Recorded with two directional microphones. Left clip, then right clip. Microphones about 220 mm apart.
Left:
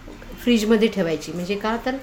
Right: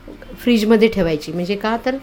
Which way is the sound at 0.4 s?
30° right (ahead or behind).